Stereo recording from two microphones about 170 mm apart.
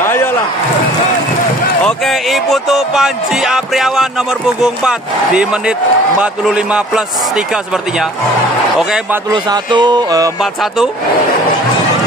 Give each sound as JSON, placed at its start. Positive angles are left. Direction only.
{"t": 0.0, "sound": "a sound", "side_deg": 15}
{"t": 1.8, "sound": "speech", "side_deg": 5}
{"t": 8.7, "sound": "speech", "side_deg": -5}
{"t": 9.3, "sound": "speech", "side_deg": -25}
{"t": 10.4, "sound": "speech", "side_deg": -5}